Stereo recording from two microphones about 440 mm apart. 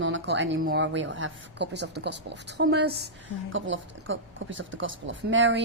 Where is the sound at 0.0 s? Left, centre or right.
Right.